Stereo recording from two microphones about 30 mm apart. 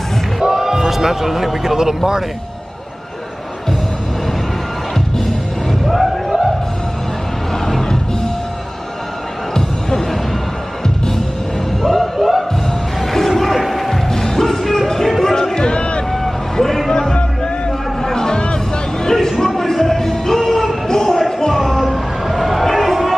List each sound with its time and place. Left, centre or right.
0.4 s speech: centre
4.9 s music: centre
9.5 s music: centre
11.8 s music: centre
13.0 s music: centre
15.5 s music: left
16.1 s vehicle: centre
17.6 s a sound: centre
19.4 s music: centre
21.7 s a sound: centre
22.7 s music: centre